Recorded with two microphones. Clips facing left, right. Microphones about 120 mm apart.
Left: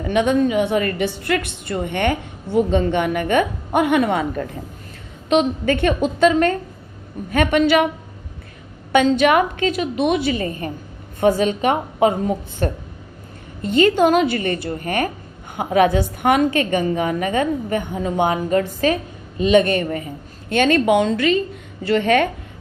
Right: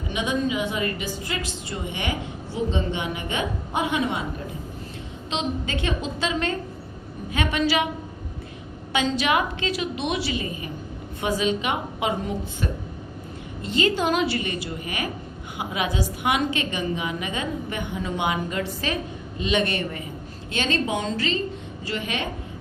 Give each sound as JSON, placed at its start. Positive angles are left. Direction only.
{"t": 0.0, "sound": "a woman's voice", "side_deg": 60}
{"t": 9.0, "sound": "a woman's voice", "side_deg": 50}
{"t": 20.5, "sound": "a woman's voice", "side_deg": 55}